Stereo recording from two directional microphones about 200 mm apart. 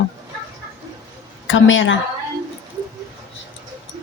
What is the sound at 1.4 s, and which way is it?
Speech, 75° left (ahead or behind).